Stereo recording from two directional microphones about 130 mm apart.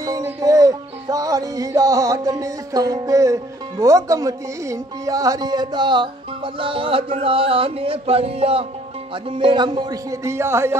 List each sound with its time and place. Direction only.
0.0 s music: 25° right (ahead or behind)
3.8 s speech: 25° right (ahead or behind)